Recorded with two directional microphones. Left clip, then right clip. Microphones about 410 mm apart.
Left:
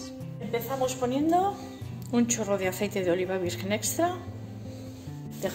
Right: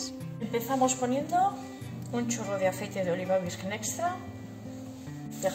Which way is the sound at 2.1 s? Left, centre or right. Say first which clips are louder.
Left 5 dB; left.